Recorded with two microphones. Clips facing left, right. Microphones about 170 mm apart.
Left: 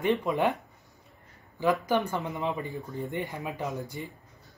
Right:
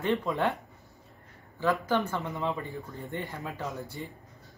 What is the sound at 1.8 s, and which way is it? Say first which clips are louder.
Speech: left 1 dB; 15° left (ahead or behind).